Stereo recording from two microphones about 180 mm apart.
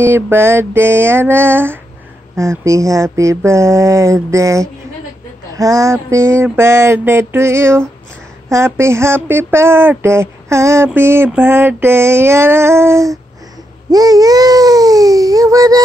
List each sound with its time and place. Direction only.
0.0 s speech: 10° right (ahead or behind)
13.8 s babbling: 20° right (ahead or behind)